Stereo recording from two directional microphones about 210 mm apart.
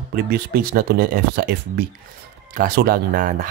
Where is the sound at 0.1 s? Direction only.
50° right (ahead or behind).